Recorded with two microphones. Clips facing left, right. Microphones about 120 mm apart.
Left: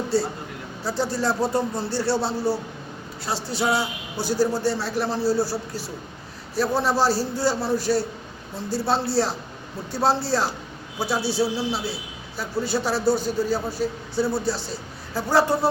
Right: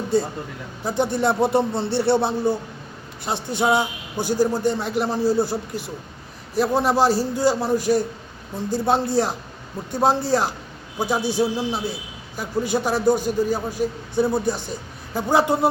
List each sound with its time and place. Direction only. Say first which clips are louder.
0.1 s a man's voice: right 4 dB; 20° right (ahead or behind)